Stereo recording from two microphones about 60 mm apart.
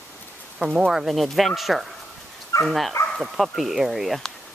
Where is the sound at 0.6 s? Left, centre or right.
Centre.